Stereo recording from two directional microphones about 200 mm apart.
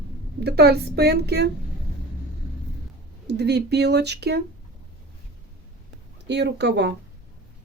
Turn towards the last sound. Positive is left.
turn(degrees=-55)  # may be behind; listen again after turning